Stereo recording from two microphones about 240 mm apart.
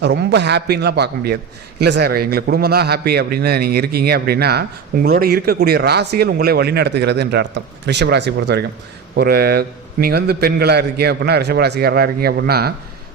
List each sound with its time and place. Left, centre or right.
0.0 s a man's voice: right